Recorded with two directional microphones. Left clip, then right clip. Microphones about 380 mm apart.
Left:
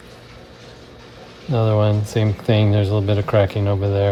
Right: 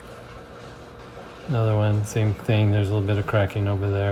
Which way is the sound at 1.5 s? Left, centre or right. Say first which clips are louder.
Left 6 dB; left.